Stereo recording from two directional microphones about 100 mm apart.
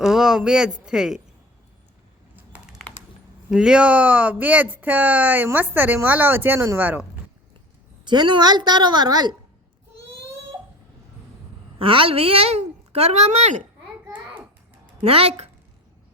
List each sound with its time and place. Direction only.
0.0 s speech: 5° right (ahead or behind)
2.3 s typing: 15° right (ahead or behind)
3.5 s a woman's voice: 10° right (ahead or behind)
8.0 s a woman's voice: 50° right (ahead or behind)
11.8 s a woman's voice: 65° right (ahead or behind); by 13.5 s 90° right
15.0 s a woman's voice: 75° right (ahead or behind)